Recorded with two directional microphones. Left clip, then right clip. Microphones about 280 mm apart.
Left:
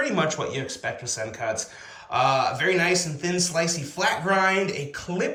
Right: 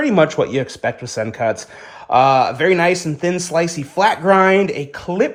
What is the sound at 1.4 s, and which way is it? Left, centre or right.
Speech, right.